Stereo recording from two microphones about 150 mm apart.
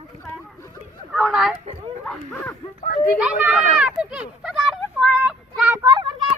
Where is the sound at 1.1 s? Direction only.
5° right (ahead or behind).